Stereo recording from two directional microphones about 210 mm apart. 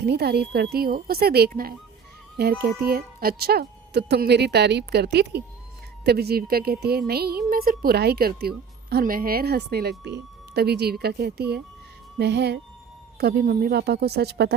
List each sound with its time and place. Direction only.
0.0 s speech: 50° right (ahead or behind)